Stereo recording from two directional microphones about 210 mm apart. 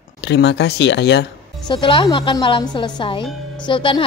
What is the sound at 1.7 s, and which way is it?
A woman's voice, 25° left (ahead or behind).